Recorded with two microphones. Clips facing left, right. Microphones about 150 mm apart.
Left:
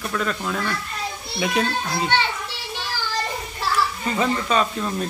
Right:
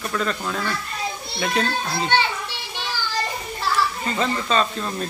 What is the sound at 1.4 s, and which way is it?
Speech, 10° left (ahead or behind).